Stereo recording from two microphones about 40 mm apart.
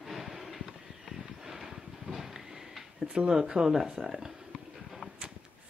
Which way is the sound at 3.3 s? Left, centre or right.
Centre.